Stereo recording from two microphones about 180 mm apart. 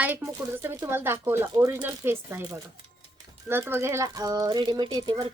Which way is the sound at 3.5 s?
10° right (ahead or behind).